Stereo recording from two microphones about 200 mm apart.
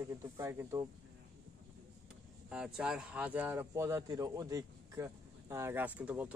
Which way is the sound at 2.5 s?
5° right (ahead or behind).